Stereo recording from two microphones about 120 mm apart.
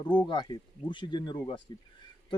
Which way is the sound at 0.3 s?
40° left (ahead or behind).